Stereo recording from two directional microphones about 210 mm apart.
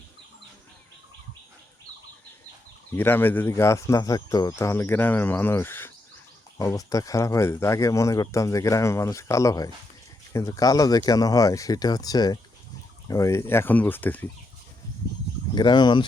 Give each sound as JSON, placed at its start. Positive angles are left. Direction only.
{"t": 2.9, "sound": "speech", "side_deg": 10}
{"t": 15.5, "sound": "speech", "side_deg": 20}